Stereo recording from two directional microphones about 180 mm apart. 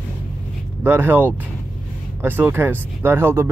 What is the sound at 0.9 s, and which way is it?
Speech, 10° right (ahead or behind).